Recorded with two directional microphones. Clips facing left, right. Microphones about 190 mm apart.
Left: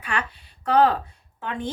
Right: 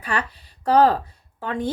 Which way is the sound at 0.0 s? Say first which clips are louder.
Right 3 dB; 35° right (ahead or behind).